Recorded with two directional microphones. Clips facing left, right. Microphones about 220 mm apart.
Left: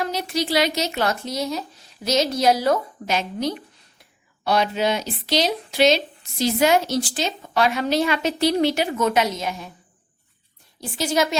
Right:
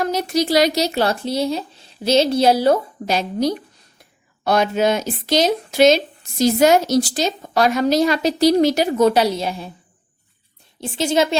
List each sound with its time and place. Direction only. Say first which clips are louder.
0.0 s speech: right 5 dB; 45° right (ahead or behind)
10.8 s a woman's voice: right 4 dB; 25° right (ahead or behind)